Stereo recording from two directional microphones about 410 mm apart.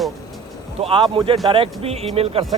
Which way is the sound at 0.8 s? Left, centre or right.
Centre.